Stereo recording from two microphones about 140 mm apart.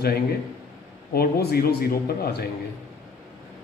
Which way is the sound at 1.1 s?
90° left.